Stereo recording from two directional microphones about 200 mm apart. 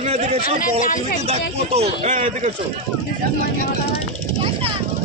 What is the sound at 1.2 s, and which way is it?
Speech, 30° right (ahead or behind).